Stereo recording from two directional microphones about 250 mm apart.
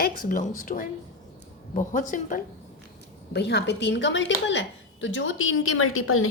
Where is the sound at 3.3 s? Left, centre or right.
Left.